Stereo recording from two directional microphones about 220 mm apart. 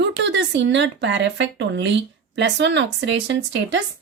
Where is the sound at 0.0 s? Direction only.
55° right (ahead or behind).